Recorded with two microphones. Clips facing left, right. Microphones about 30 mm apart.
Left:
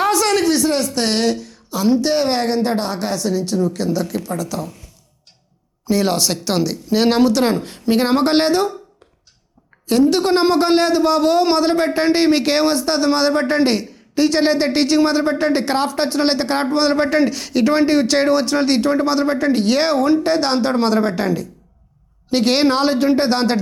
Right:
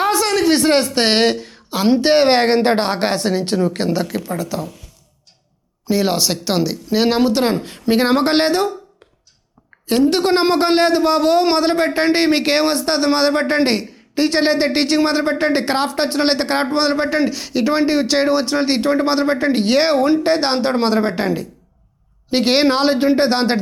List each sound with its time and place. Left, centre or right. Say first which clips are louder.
0.2 s a sound: left 1 dB; centre
0.4 s speech: right 3 dB; right
4.1 s speech: right 1 dB; right
5.8 s speech: even; centre
7.6 s speech: right 1 dB; centre
9.8 s a woman's voice: left 1 dB; right
10.2 s speech: even; right
16.9 s speech: left 2 dB; centre